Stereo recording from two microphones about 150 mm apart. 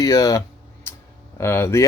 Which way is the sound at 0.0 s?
25° left (ahead or behind).